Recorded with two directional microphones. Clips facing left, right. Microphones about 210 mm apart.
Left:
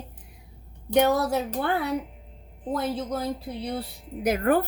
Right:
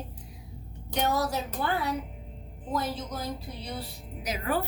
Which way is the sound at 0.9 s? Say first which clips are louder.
Left 7 dB; 60° left (ahead or behind).